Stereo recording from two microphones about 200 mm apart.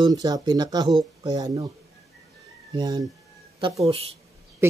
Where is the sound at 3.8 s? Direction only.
30° right (ahead or behind).